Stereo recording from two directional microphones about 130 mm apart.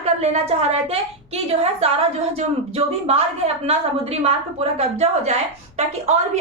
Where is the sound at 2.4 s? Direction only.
50° right (ahead or behind).